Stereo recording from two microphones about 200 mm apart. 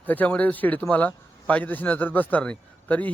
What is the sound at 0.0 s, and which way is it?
A man's voice, 10° left (ahead or behind).